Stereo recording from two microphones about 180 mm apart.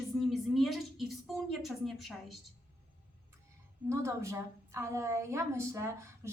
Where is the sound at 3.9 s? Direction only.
15° right (ahead or behind).